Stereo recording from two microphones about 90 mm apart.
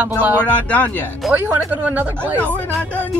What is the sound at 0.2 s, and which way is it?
Speech, 20° right (ahead or behind).